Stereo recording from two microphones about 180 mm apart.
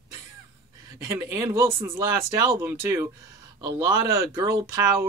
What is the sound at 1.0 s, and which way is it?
Speech, 20° right (ahead or behind).